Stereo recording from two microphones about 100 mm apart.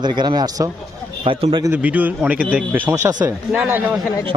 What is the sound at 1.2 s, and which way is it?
Speech, 60° right (ahead or behind).